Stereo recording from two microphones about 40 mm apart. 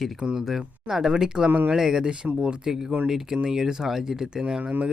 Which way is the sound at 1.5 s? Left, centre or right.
Right.